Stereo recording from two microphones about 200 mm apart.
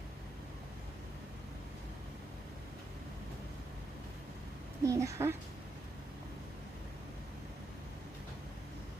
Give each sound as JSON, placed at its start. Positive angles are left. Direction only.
{"t": 4.8, "sound": "a woman's voice", "side_deg": -15}